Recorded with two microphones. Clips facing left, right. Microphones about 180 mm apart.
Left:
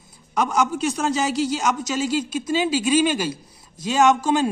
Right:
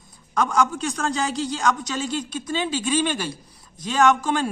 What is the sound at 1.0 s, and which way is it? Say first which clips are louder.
A man's voice: left 2 dB; 5° left (ahead or behind).